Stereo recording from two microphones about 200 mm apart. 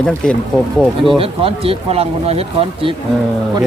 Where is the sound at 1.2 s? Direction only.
30° right (ahead or behind).